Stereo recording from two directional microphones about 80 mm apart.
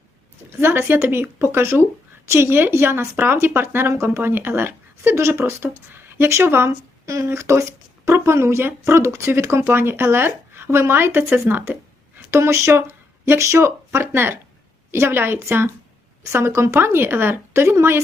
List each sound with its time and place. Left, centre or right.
0.6 s a woman's voice: right
11.4 s a sound: right
12.4 s speech: right